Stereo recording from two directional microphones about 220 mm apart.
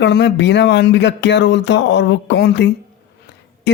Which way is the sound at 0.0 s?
50° left (ahead or behind).